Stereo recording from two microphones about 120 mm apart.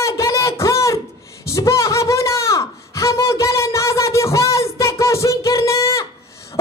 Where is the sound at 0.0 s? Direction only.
25° left (ahead or behind).